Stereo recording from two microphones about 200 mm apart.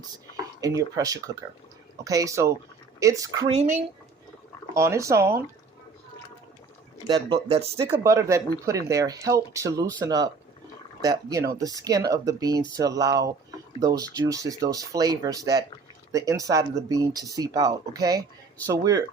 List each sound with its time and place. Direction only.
0.6 s speech: 15° right (ahead or behind)
3.5 s speech: 30° right (ahead or behind)
4.7 s speech: 15° right (ahead or behind)
7.1 s speech: 30° right (ahead or behind)
7.9 s speech: 15° right (ahead or behind)